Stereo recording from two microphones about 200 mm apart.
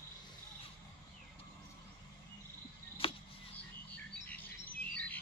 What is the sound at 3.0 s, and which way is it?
Chop, 25° left (ahead or behind).